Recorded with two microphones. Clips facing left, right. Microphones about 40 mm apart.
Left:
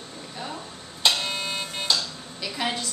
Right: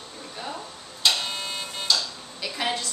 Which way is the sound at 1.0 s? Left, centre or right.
Centre.